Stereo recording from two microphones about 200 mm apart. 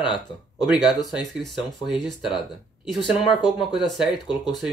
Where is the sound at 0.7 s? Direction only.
Centre (ahead or behind).